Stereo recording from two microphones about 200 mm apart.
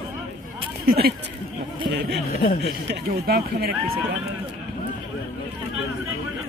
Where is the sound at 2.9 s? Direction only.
50° right (ahead or behind).